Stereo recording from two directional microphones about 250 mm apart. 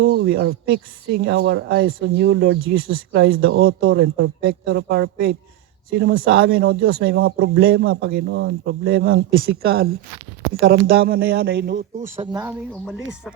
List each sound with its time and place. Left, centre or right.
0.0 s speech: right
2.2 s speech: right
4.0 s speech: right
9.6 s speech: right
10.6 s speech: right
12.2 s speech: centre